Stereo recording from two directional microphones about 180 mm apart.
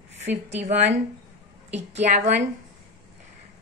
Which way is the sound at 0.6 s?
40° right (ahead or behind).